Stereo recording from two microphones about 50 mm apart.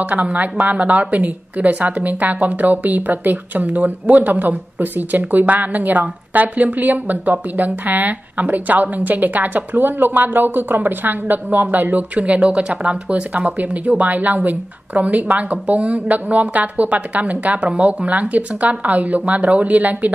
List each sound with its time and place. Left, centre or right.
0.0 s a woman's voice: right